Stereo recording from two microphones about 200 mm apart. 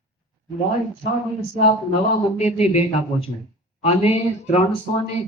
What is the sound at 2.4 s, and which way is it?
Speech, 35° left (ahead or behind).